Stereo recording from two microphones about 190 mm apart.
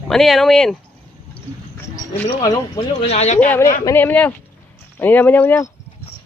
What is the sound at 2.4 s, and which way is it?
Speech, 20° left (ahead or behind).